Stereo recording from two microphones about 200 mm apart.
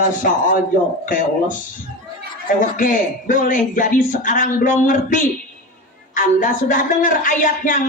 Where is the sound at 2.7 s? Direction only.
40° left (ahead or behind).